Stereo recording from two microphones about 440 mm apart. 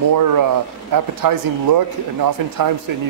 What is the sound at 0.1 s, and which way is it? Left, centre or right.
Speech, right.